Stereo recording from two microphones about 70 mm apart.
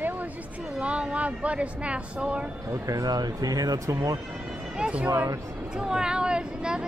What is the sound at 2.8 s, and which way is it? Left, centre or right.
Speech, right.